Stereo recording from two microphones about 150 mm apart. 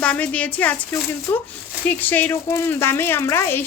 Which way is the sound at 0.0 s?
10° left (ahead or behind).